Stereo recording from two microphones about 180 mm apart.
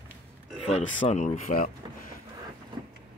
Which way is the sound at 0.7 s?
40° left (ahead or behind).